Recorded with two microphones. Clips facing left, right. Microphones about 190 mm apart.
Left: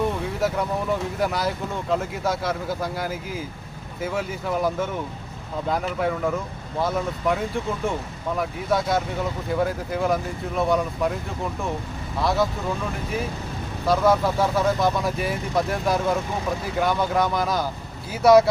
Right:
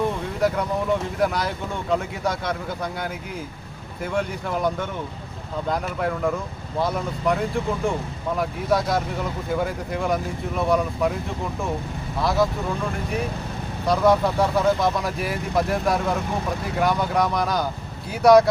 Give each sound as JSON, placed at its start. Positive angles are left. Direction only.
{"t": 0.3, "sound": "speech", "side_deg": 0}
{"t": 12.2, "sound": "speech", "side_deg": 0}
{"t": 13.8, "sound": "speech", "side_deg": 0}